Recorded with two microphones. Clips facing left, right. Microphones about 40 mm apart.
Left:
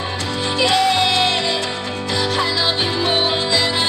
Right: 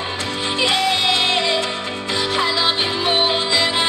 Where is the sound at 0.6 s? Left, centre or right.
Centre.